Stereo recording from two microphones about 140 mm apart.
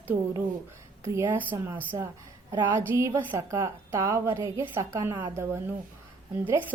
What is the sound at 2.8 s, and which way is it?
A woman's voice, 20° right (ahead or behind).